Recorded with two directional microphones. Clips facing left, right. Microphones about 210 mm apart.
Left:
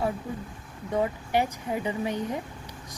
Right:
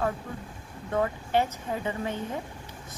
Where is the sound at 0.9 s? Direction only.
15° left (ahead or behind).